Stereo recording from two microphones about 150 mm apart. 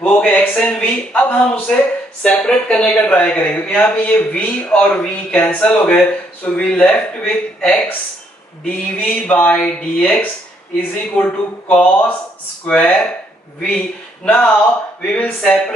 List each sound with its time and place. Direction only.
0.0 s speech: 10° left (ahead or behind)